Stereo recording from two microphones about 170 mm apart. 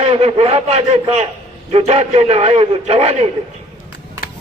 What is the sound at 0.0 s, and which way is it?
A man's voice, 35° right (ahead or behind).